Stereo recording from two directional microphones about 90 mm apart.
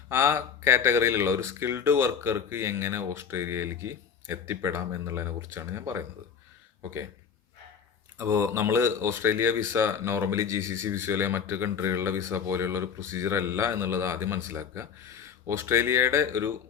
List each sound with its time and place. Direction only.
0.1 s speech: 30° right (ahead or behind)
8.2 s speech: 30° right (ahead or behind)